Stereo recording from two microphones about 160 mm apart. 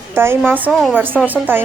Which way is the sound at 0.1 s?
15° right (ahead or behind).